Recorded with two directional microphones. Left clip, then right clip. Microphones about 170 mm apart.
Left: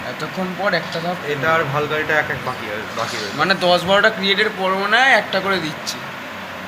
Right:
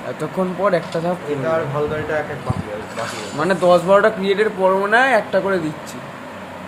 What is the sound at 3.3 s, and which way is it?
Speech, 40° right (ahead or behind).